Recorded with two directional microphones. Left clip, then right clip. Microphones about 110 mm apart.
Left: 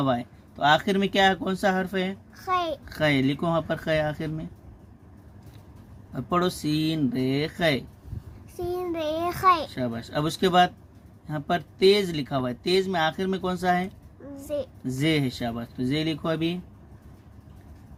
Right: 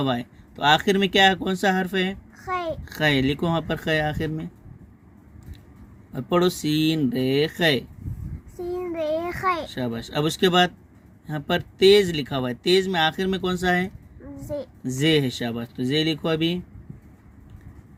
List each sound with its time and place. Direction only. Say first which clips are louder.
0.0 s speech: even; 40° right (ahead or behind)
2.4 s a sound: left 2 dB; 30° left (ahead or behind)
2.8 s speech: right 2 dB; 40° right (ahead or behind)
6.1 s speech: right 4 dB; 40° right (ahead or behind)
8.5 s child singing: even; 35° left (ahead or behind)
9.0 s a child's voice: right 3 dB; 35° left (ahead or behind)
9.6 s speech: right 1 dB; 40° right (ahead or behind)
14.3 s a woman's voice: left 1 dB; 20° left (ahead or behind)
14.8 s speech: right 5 dB; 40° right (ahead or behind)